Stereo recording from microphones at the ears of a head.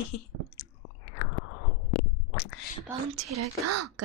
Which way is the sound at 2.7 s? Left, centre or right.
Right.